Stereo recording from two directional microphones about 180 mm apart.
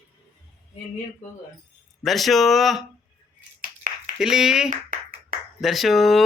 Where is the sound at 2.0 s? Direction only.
Centre (ahead or behind).